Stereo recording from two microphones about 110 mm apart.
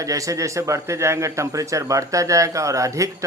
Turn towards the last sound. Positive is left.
turn(degrees=-30)  # may be behind; listen again after turning